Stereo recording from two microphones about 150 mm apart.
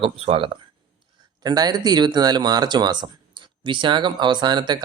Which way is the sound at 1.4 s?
25° right (ahead or behind).